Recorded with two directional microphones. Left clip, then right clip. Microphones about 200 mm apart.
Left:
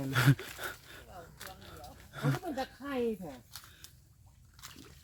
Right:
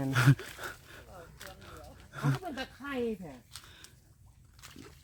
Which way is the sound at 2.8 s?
35° right (ahead or behind).